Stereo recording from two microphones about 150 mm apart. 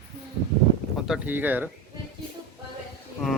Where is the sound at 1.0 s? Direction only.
5° right (ahead or behind).